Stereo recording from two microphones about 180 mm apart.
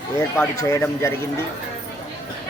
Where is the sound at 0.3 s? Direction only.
15° left (ahead or behind).